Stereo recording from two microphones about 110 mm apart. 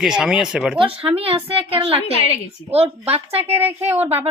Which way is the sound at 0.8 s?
60° right (ahead or behind).